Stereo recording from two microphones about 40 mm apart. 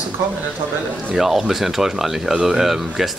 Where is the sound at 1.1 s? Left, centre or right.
Centre.